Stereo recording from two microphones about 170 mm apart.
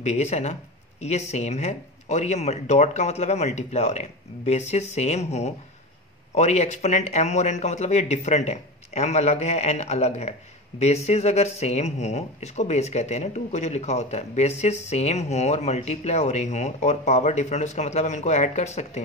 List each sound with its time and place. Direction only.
0.0 s speech: 45° left (ahead or behind)